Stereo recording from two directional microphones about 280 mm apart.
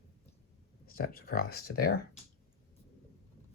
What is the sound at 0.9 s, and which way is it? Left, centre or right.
Speech, left.